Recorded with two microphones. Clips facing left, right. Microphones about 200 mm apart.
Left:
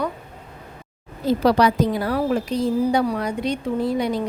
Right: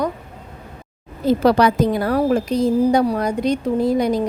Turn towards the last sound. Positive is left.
turn(degrees=-40)  # may be behind; listen again after turning